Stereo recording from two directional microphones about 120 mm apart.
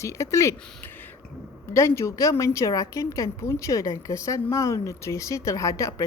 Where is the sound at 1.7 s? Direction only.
25° left (ahead or behind).